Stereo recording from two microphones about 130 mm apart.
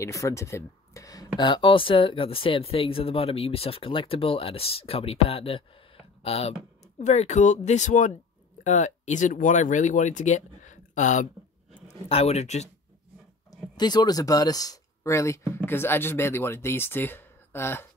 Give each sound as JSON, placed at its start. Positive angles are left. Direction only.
{"t": 0.0, "sound": "speech", "side_deg": 20}
{"t": 12.1, "sound": "speech", "side_deg": 55}
{"t": 13.5, "sound": "speech", "side_deg": 30}